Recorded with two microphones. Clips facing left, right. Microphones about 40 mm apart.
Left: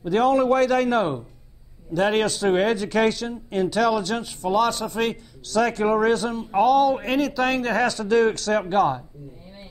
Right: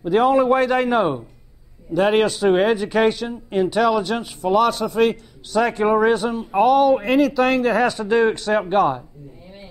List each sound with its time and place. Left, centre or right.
0.0 s a man's voice: centre
5.5 s speech: centre